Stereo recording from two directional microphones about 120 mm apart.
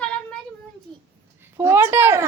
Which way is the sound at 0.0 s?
10° left (ahead or behind).